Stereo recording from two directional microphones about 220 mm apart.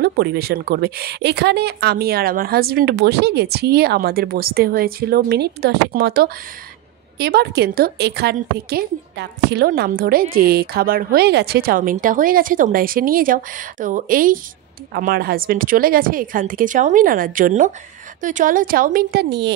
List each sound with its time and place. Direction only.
0.0 s speech: 45° right (ahead or behind)